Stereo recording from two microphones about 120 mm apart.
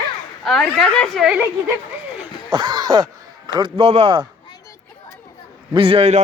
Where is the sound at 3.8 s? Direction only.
55° right (ahead or behind).